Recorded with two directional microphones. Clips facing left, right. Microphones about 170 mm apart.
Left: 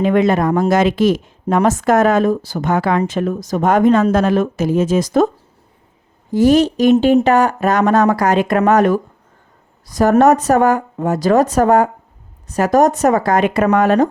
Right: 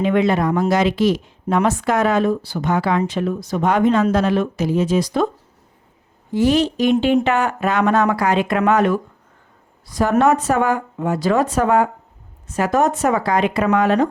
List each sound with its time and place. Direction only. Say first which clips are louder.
0.0 s a woman's voice: left 3 dB; 45° left (ahead or behind)
6.3 s speech: left 5 dB; 40° left (ahead or behind)